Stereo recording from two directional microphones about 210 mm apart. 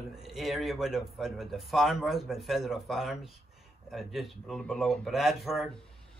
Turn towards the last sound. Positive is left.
turn(degrees=0)  # may be behind; listen again after turning